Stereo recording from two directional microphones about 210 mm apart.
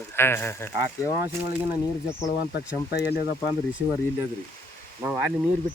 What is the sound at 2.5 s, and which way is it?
Speech, 50° left (ahead or behind).